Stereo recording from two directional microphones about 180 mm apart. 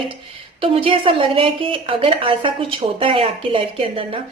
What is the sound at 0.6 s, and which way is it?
A woman's voice, 30° right (ahead or behind).